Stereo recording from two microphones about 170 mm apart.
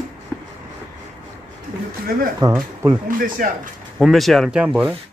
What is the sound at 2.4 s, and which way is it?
Speech, 25° right (ahead or behind).